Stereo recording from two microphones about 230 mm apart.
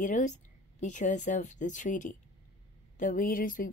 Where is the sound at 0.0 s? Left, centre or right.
Left.